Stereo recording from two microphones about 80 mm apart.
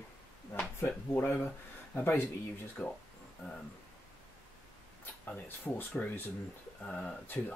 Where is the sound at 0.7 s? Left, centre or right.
Left.